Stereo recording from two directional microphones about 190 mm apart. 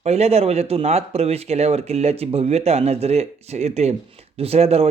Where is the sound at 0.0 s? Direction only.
35° right (ahead or behind).